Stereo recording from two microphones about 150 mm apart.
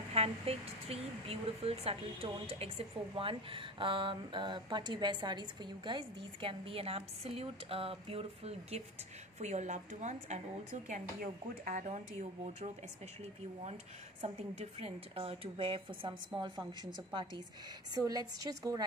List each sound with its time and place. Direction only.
0.1 s a woman's voice: 45° right (ahead or behind)
10.9 s speech: 65° right (ahead or behind)
11.8 s a woman's voice: 50° right (ahead or behind)
14.2 s a woman's voice: 45° right (ahead or behind); by 18.9 s 25° right (ahead or behind)